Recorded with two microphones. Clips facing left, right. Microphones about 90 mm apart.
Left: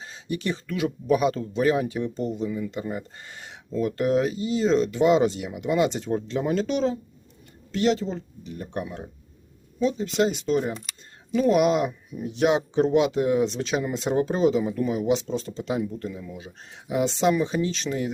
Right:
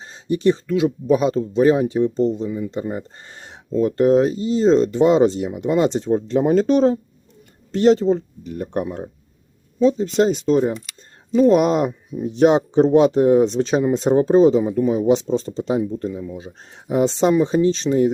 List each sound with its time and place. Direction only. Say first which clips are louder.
0.0 s speech: right 11 dB; 30° right (ahead or behind)
6.2 s speech: right 10 dB; 40° right (ahead or behind)